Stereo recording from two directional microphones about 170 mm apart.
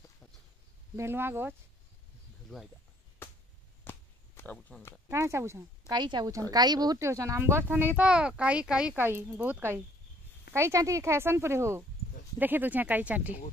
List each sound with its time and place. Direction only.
0.9 s speech: 15° right (ahead or behind)
3.2 s chop: 15° left (ahead or behind)
4.6 s speech: 5° left (ahead or behind)
5.0 s speech: 15° right (ahead or behind)
5.9 s speech: 25° right (ahead or behind); by 13.3 s 10° right (ahead or behind)